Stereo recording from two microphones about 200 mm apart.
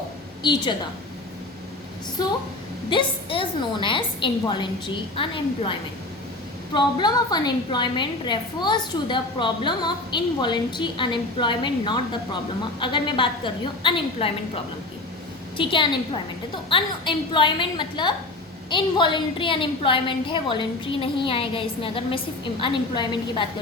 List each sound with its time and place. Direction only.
0.4 s a woman's voice: 20° left (ahead or behind)
2.2 s a woman's voice: 20° left (ahead or behind)
6.7 s a woman's voice: 20° left (ahead or behind)